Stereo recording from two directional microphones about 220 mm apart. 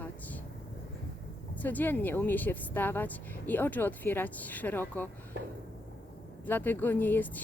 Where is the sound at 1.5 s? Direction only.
10° left (ahead or behind).